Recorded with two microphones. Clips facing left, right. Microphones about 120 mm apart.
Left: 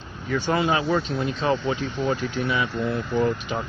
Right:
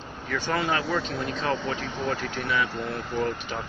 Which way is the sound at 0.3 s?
20° left (ahead or behind).